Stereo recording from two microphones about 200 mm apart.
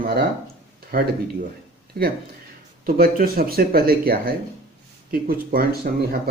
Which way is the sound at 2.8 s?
45° right (ahead or behind).